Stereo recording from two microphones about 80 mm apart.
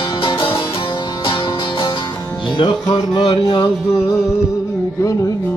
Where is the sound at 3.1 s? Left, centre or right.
Left.